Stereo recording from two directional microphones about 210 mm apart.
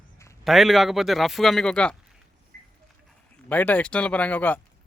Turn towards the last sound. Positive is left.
turn(degrees=10)  # may be behind; listen again after turning